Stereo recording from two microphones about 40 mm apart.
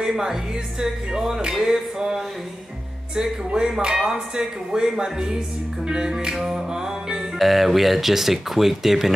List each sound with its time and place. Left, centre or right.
0.0 s speech: centre
7.3 s speech: centre